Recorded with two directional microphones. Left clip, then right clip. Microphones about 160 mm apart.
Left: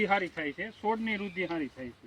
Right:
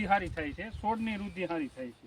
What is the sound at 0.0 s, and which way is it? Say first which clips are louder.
Speech: left 1 dB; 15° right (ahead or behind).